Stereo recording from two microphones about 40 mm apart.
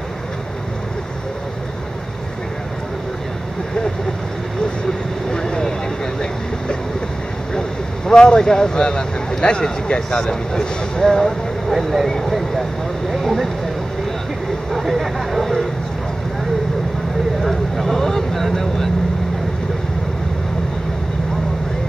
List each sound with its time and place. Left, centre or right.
5.3 s vehicle: centre
8.1 s speech: centre
11.7 s speech: centre
14.7 s speech: centre
17.4 s vehicle: centre